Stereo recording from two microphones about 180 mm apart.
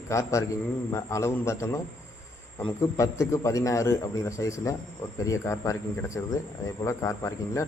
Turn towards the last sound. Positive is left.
turn(degrees=15)  # may be behind; listen again after turning